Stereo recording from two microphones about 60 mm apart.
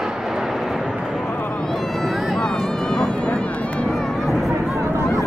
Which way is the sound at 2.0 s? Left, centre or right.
Centre.